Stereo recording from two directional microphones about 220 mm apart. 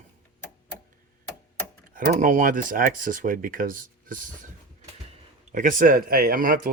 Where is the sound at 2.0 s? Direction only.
35° right (ahead or behind).